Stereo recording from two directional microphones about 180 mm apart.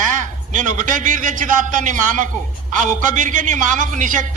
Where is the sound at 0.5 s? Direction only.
45° right (ahead or behind).